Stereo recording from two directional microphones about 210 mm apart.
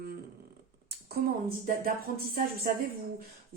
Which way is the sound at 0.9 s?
50° right (ahead or behind).